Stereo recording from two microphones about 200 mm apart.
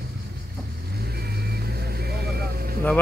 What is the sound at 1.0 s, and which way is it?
Vehicle, 50° right (ahead or behind).